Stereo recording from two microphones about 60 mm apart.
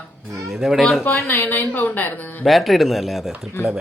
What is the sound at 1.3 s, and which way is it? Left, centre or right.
A woman's voice, left.